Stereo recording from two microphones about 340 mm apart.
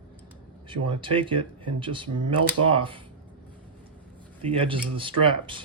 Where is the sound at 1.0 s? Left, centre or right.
Centre.